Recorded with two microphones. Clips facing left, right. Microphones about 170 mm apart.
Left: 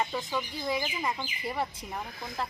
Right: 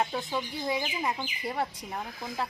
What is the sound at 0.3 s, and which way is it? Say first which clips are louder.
Speech: right 1 dB; 10° right (ahead or behind).